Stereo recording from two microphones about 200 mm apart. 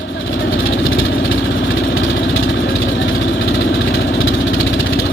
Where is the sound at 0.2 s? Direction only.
70° left (ahead or behind).